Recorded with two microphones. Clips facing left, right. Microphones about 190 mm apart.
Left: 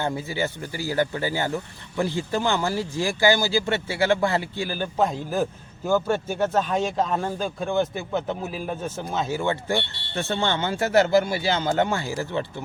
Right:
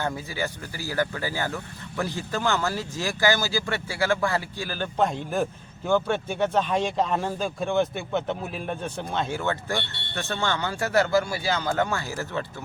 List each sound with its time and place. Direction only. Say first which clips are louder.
0.0 s speech: left 3 dB; 20° left (ahead or behind)
4.9 s speech: left 1 dB; 5° left (ahead or behind)
9.5 s speech: left 3 dB; 15° left (ahead or behind)